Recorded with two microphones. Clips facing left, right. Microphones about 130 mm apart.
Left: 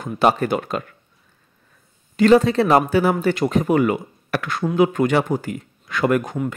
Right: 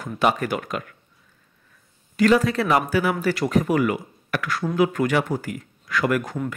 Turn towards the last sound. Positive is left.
turn(degrees=25)  # may be behind; listen again after turning